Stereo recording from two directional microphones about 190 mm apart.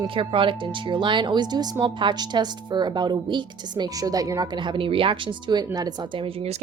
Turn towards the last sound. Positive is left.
turn(degrees=-30)  # may be behind; listen again after turning